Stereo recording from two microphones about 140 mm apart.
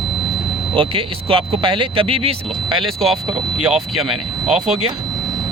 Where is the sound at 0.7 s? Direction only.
40° right (ahead or behind).